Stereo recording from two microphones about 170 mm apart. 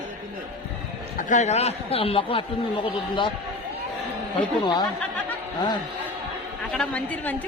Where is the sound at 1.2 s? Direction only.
45° left (ahead or behind).